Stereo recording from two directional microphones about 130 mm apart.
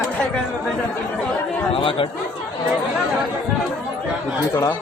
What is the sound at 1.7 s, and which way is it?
Speech, 45° left (ahead or behind).